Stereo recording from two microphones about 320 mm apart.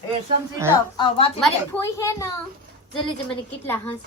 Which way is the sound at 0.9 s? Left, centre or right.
Centre.